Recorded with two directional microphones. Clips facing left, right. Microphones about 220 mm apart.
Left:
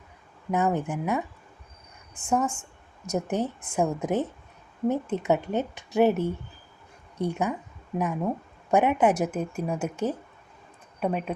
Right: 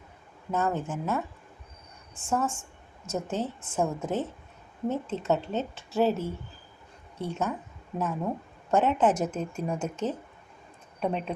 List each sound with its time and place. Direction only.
0.5 s a woman's voice: 15° left (ahead or behind)